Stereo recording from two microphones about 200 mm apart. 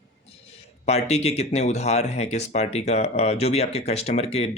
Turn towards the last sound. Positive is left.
turn(degrees=30)  # may be behind; listen again after turning